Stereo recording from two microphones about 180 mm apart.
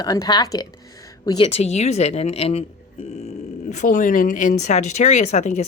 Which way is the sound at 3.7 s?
45° left (ahead or behind).